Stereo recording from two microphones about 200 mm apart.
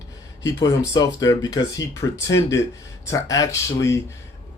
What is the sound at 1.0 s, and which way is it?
Speech, 20° left (ahead or behind).